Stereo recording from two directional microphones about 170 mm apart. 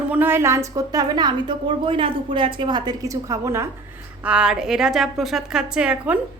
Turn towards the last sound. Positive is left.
turn(degrees=-5)  # may be behind; listen again after turning